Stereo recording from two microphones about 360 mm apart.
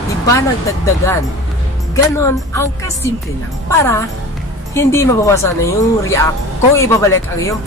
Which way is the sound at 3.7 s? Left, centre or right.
Centre.